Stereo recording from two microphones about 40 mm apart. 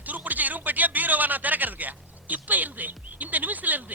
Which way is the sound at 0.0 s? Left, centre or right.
Right.